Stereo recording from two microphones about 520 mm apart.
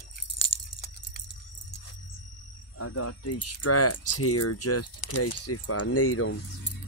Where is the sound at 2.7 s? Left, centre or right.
Left.